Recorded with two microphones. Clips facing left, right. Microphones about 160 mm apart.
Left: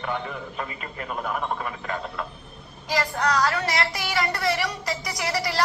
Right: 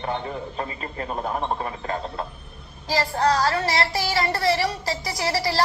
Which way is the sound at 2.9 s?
30° right (ahead or behind).